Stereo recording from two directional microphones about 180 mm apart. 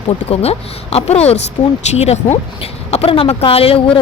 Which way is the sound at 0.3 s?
35° left (ahead or behind).